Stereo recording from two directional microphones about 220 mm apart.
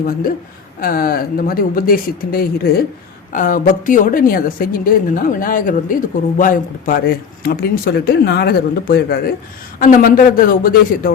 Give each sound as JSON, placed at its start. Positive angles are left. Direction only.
{"t": 0.8, "sound": "a woman's voice", "side_deg": 40}